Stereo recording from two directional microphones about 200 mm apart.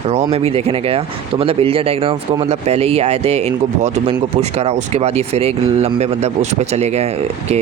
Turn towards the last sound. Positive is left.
turn(degrees=-30)  # may be behind; listen again after turning